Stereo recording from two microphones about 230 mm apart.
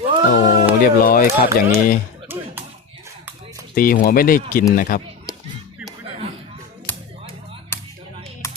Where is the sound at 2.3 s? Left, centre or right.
Centre.